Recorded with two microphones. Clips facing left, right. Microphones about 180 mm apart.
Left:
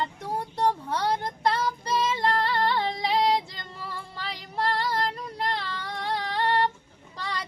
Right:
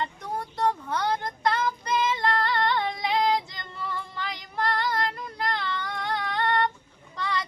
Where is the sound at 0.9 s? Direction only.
35° left (ahead or behind).